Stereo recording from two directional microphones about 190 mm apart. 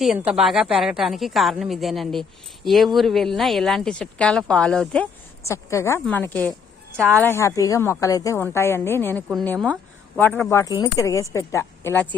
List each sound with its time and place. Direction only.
0.0 s speech: 5° right (ahead or behind); by 12.0 s 15° left (ahead or behind)